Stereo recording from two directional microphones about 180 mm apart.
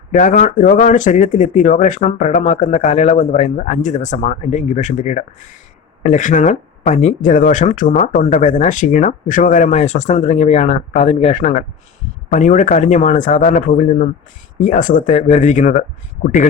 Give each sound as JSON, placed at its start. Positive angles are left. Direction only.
{"t": 0.1, "sound": "speech", "side_deg": 45}